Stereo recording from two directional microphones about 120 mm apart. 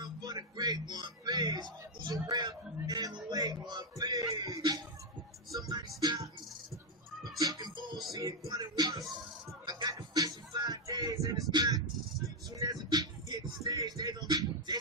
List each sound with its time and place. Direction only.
0.0 s speech: 30° right (ahead or behind)
3.2 s music: 35° right (ahead or behind)
6.0 s music: 30° right (ahead or behind)
7.3 s music: 30° right (ahead or behind)
9.6 s a sound: 35° right (ahead or behind)
12.5 s music: 30° right (ahead or behind)